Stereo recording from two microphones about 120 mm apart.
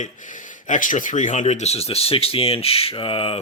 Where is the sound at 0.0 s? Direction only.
90° left; by 3.4 s 50° left (ahead or behind).